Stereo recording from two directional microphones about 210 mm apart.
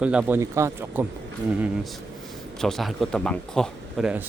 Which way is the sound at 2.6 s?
Centre (ahead or behind).